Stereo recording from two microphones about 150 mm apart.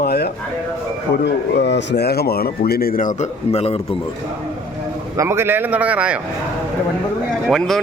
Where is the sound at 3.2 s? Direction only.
45° left (ahead or behind).